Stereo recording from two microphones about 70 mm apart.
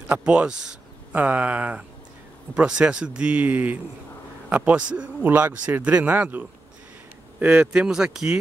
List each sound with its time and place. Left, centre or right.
0.1 s speech: centre
1.1 s a man's voice: right